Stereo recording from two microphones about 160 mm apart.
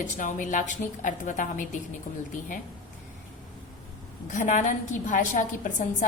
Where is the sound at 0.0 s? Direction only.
55° left (ahead or behind).